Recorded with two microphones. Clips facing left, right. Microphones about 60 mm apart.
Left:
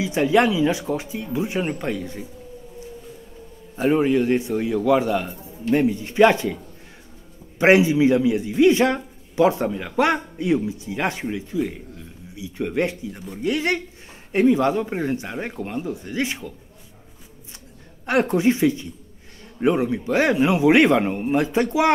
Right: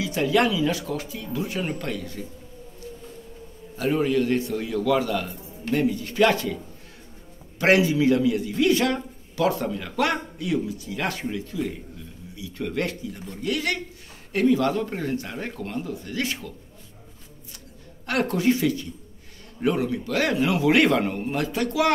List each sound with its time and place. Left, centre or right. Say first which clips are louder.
0.0 s a man's voice: left 4 dB; left
3.7 s a man's voice: left 4 dB; left
18.0 s a man's voice: left 4 dB; left